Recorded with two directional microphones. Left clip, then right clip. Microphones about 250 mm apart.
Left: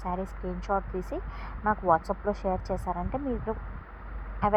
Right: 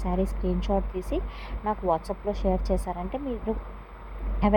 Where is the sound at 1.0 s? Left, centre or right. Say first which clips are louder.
Right 3 dB; centre.